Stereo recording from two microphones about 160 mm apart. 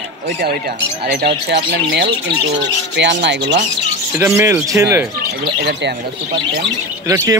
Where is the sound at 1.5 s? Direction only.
90° right.